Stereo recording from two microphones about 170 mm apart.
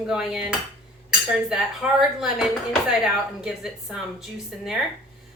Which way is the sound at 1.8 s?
5° right (ahead or behind).